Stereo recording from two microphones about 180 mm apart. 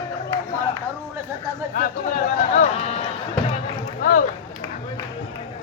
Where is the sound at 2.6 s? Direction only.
35° left (ahead or behind).